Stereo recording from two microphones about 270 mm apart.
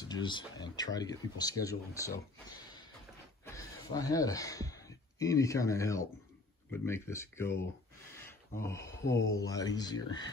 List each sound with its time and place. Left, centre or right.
0.1 s speech: centre
3.4 s speech: centre